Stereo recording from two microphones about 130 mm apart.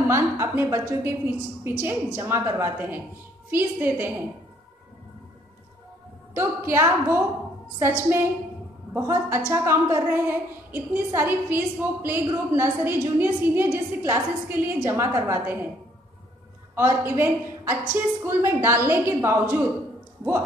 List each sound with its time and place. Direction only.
0.1 s a woman's voice: 20° right (ahead or behind)
6.3 s a woman's voice: 20° right (ahead or behind)
8.9 s a woman's voice: 20° right (ahead or behind)
16.7 s a woman's voice: 20° right (ahead or behind)